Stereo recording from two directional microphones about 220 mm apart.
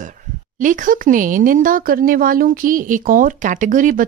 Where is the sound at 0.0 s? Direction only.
35° right (ahead or behind).